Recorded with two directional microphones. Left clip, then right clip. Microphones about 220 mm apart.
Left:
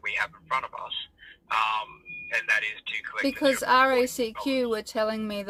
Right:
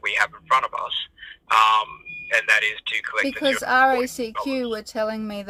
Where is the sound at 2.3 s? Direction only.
55° right (ahead or behind).